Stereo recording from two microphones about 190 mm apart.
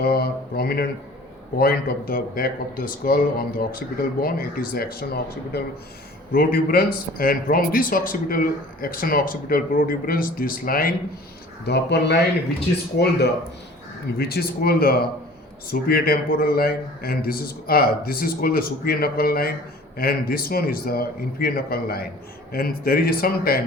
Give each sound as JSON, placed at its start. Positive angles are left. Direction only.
{"t": 0.0, "sound": "speech", "side_deg": 55}
{"t": 11.6, "sound": "speech", "side_deg": 60}